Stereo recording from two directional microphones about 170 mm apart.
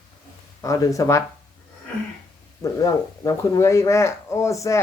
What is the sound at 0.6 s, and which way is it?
Speech, 20° left (ahead or behind).